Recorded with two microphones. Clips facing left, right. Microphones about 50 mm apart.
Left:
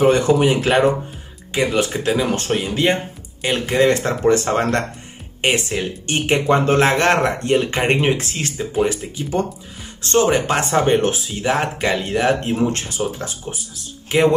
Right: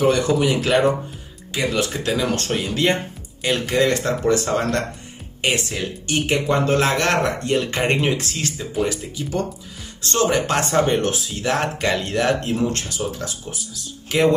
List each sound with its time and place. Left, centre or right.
0.0 s speech: left; by 10.9 s centre
10.9 s speech: left
12.4 s speech: left